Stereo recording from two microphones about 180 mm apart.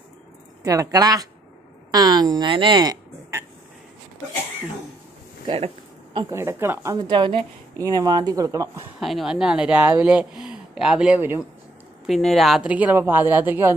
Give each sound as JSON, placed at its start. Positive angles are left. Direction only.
{"t": 0.7, "sound": "a woman's voice", "side_deg": -20}
{"t": 6.3, "sound": "a woman's voice", "side_deg": -15}
{"t": 9.0, "sound": "speech", "side_deg": 0}
{"t": 12.1, "sound": "speech", "side_deg": 0}